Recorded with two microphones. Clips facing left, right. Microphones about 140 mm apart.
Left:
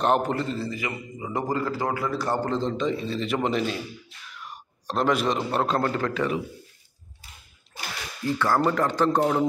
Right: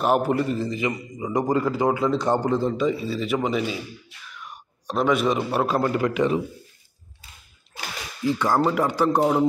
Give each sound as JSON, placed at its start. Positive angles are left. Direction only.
{"t": 0.0, "sound": "a man's voice", "side_deg": -5}
{"t": 8.4, "sound": "a man's voice", "side_deg": -15}